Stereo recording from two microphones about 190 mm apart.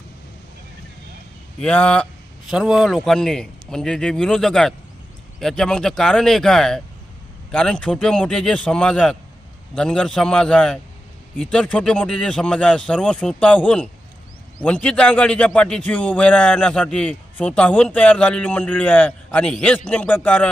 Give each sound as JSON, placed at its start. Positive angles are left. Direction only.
{"t": 1.6, "sound": "a man's voice", "side_deg": 5}